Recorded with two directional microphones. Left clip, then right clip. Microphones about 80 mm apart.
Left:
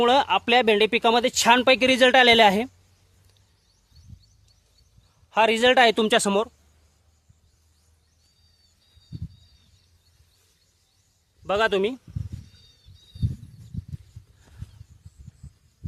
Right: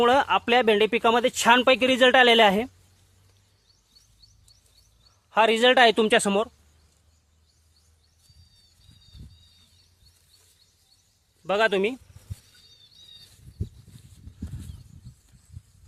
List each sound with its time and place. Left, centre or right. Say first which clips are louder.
0.0 s speech: left 1 dB; left
1.5 s a woman's voice: left 1 dB; left
5.3 s a man's voice: even; centre
5.9 s speech: even; left
11.4 s a man's voice: even; centre